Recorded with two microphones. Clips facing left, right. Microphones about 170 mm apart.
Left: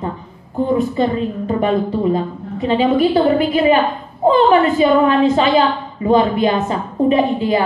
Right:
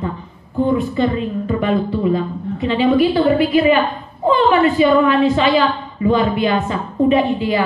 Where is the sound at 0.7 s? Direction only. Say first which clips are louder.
Left 4 dB; 40° left (ahead or behind).